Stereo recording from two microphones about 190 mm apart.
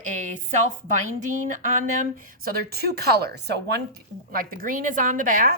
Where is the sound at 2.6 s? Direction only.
55° right (ahead or behind).